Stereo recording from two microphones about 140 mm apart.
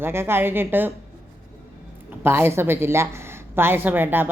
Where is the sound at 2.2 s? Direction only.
15° right (ahead or behind).